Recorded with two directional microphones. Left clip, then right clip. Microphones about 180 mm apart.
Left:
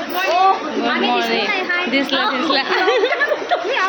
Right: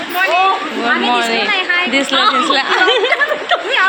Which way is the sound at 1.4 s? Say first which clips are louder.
Right 5 dB; 10° left (ahead or behind).